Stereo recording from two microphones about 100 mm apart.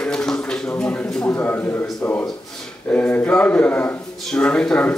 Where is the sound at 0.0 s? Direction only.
5° left (ahead or behind).